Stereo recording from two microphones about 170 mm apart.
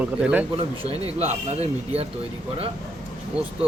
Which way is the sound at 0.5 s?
35° right (ahead or behind).